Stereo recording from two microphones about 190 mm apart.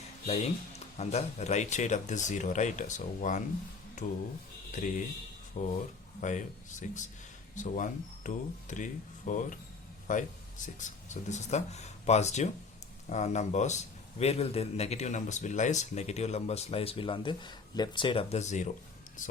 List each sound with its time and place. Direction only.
0.3 s speech: 35° left (ahead or behind)